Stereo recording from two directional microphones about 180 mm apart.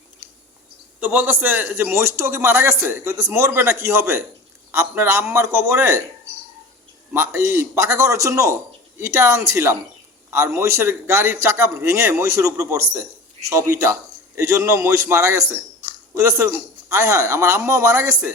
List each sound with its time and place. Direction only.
0.9 s a man's voice: 10° right (ahead or behind)
7.1 s a man's voice: 15° right (ahead or behind)